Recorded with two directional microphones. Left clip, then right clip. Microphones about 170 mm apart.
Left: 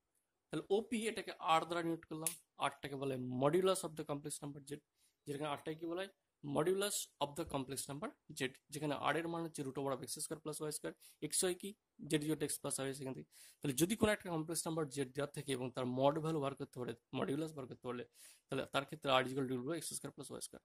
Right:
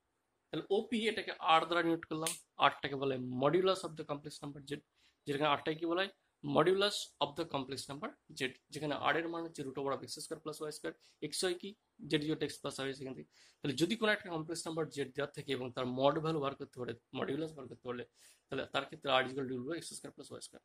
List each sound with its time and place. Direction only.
0.5 s speech: 60° left (ahead or behind)